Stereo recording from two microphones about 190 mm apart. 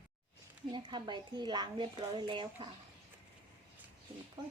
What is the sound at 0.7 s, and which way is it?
A woman's voice, 25° right (ahead or behind).